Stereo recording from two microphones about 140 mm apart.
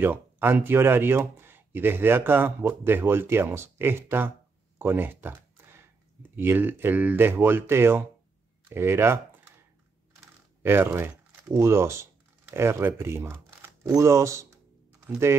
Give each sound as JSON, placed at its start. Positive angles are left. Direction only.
{"t": 0.0, "sound": "speech", "side_deg": -15}
{"t": 4.7, "sound": "a sound", "side_deg": -15}
{"t": 6.3, "sound": "speech", "side_deg": -15}
{"t": 10.6, "sound": "speech", "side_deg": -15}